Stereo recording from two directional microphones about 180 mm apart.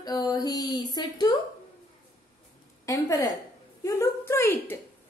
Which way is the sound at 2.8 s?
20° left (ahead or behind).